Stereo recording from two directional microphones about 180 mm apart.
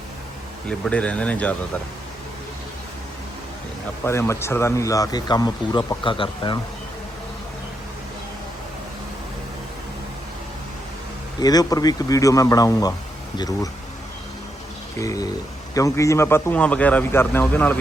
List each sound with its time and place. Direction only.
0.7 s a man's voice: 5° left (ahead or behind)
4.0 s speech: 15° left (ahead or behind)
11.3 s speech: 20° left (ahead or behind)
14.9 s a man's voice: 20° left (ahead or behind)